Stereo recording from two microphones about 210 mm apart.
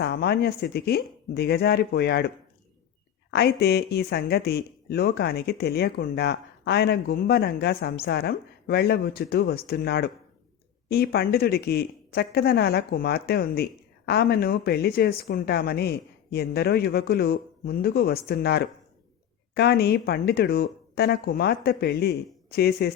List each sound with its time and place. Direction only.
0.0 s a woman's voice: 50° left (ahead or behind)
3.6 s a woman's voice: 50° left (ahead or behind)